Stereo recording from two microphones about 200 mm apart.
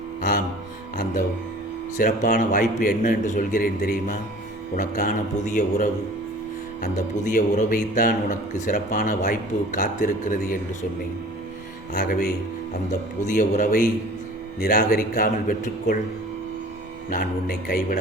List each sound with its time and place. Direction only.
0.2 s music: 40° left (ahead or behind)
2.0 s a man's voice: 45° left (ahead or behind)
6.9 s speech: 40° left (ahead or behind)
13.2 s a man's voice: 40° left (ahead or behind)
17.1 s a man's voice: 45° left (ahead or behind)